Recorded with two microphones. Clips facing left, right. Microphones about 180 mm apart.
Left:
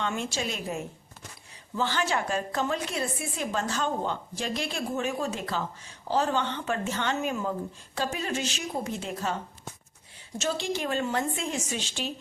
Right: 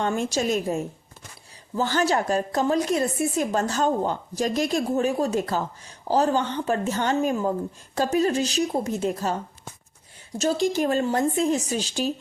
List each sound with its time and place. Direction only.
0.0 s a woman's voice: 45° right (ahead or behind)
10.4 s a woman's voice: 40° right (ahead or behind)